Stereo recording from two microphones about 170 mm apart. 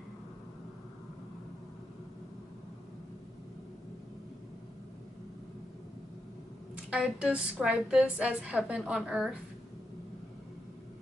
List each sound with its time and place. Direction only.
6.9 s a woman's voice: 5° right (ahead or behind)